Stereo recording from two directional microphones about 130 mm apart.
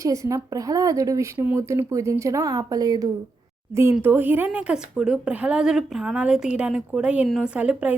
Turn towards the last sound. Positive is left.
turn(degrees=-10)  # may be behind; listen again after turning